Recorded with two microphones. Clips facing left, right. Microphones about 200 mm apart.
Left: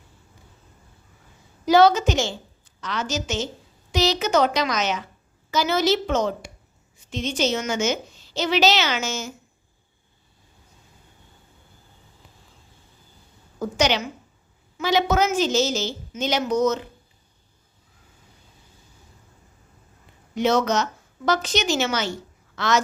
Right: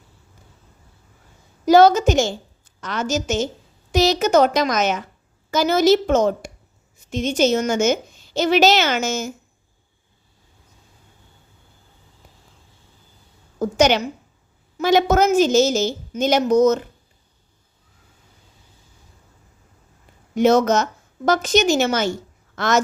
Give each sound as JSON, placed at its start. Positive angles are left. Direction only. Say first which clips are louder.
{"t": 1.6, "sound": "a woman's voice", "louder": "right 4 dB", "side_deg": -45}
{"t": 13.6, "sound": "a woman's voice", "louder": "right 5 dB", "side_deg": -50}
{"t": 20.3, "sound": "a woman's voice", "louder": "right 5 dB", "side_deg": -45}